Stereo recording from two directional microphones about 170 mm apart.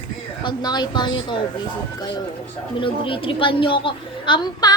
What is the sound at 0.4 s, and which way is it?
A woman's voice, 25° left (ahead or behind).